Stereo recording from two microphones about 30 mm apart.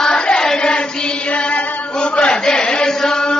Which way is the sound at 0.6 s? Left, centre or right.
Left.